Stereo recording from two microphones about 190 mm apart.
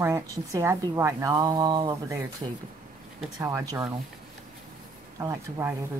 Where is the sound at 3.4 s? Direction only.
15° right (ahead or behind).